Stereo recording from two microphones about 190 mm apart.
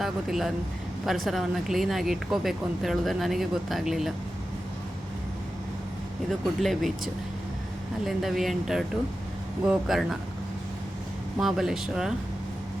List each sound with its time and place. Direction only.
0.0 s speech: centre (ahead or behind)
6.6 s speech: centre (ahead or behind)
11.3 s speech: centre (ahead or behind)